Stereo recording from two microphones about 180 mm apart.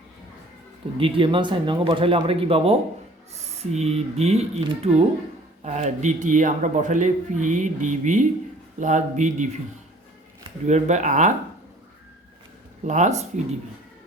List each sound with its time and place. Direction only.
0.9 s a man's voice: 30° right (ahead or behind)
10.7 s speech: 40° right (ahead or behind)
12.8 s speech: 40° right (ahead or behind)